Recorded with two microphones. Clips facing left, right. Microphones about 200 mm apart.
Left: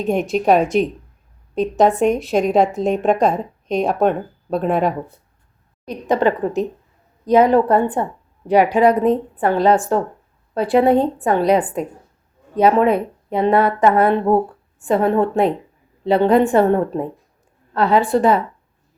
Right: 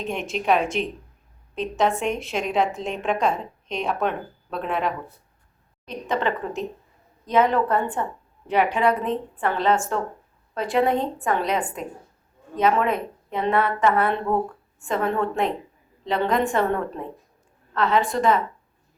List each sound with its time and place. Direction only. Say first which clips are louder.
0.0 s speech: left 9 dB; 40° left (ahead or behind)